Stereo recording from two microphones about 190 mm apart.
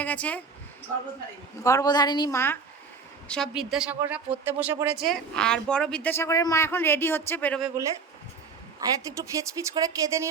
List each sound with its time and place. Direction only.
0.0 s speech: 10° left (ahead or behind)
1.6 s a woman's voice: 20° left (ahead or behind)
3.2 s a woman's voice: 5° left (ahead or behind)
4.9 s a woman's voice: centre (ahead or behind)
8.8 s speech: 20° right (ahead or behind)